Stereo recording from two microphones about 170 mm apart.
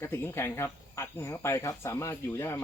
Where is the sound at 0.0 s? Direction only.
15° left (ahead or behind).